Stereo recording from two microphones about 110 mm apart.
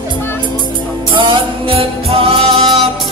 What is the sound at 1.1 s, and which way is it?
Music, 45° right (ahead or behind).